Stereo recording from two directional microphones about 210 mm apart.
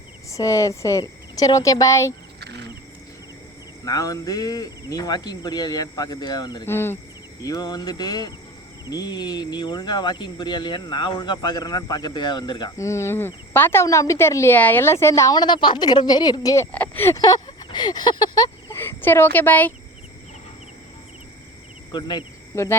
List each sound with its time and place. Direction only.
0.3 s speech: 15° left (ahead or behind)
2.4 s insect: 55° right (ahead or behind)
3.8 s speech: 15° left (ahead or behind)
21.9 s speech: 20° left (ahead or behind)